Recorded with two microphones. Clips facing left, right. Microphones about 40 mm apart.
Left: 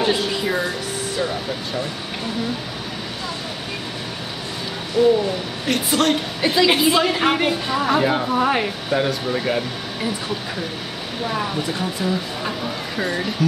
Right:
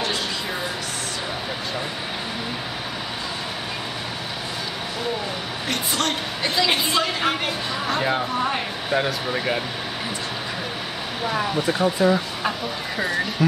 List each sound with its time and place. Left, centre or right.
5.0 s a woman's voice: centre
8.0 s a woman's voice: centre
8.4 s speech: centre
8.9 s a woman's voice: centre
11.8 s speech: right
12.4 s speech: centre